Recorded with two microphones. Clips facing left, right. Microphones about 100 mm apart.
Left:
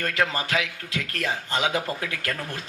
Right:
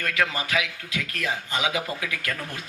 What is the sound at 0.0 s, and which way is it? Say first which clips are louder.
A man's voice: left 1 dB; 35° left (ahead or behind).